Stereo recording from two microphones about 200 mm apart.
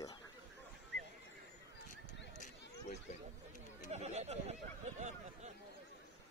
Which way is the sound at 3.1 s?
35° left (ahead or behind).